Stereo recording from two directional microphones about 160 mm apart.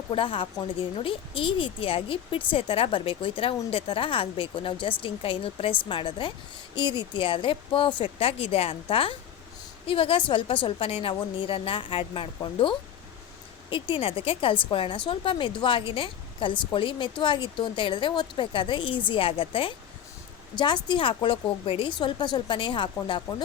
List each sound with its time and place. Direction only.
0.1 s a woman's voice: 35° left (ahead or behind)